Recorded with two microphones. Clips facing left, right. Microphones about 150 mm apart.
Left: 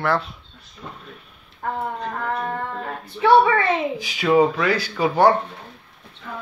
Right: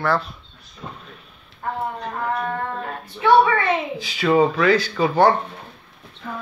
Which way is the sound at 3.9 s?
15° left (ahead or behind).